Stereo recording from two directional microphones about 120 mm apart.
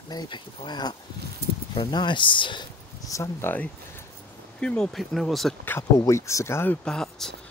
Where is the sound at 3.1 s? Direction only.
20° left (ahead or behind).